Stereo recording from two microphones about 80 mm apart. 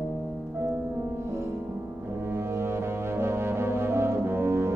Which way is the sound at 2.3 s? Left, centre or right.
Right.